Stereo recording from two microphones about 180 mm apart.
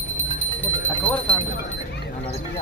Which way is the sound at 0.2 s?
10° left (ahead or behind).